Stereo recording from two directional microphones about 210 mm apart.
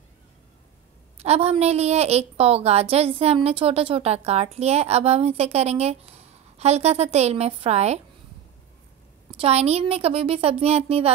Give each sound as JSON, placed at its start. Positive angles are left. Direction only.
{"t": 1.1, "sound": "a woman's voice", "side_deg": -30}
{"t": 9.4, "sound": "a woman's voice", "side_deg": -30}